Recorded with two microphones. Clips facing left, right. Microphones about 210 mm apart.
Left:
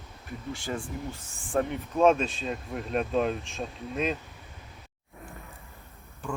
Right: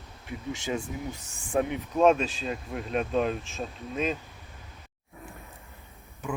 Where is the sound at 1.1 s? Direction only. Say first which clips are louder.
Even; 5° right (ahead or behind).